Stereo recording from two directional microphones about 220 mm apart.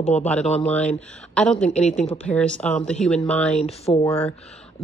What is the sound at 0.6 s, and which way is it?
Speech, 5° left (ahead or behind).